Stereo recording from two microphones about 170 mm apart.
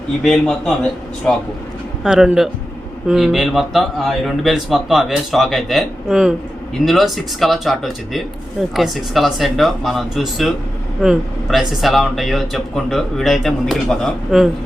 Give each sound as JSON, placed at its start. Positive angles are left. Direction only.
{"t": 0.2, "sound": "speech", "side_deg": 5}
{"t": 2.0, "sound": "speech", "side_deg": -5}